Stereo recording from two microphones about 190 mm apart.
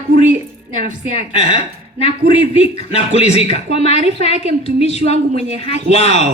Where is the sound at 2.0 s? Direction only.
30° left (ahead or behind).